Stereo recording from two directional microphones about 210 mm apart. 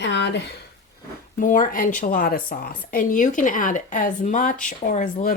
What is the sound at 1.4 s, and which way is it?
A woman's voice, 40° left (ahead or behind).